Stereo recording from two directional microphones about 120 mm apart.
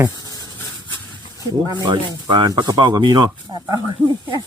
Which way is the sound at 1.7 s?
40° right (ahead or behind).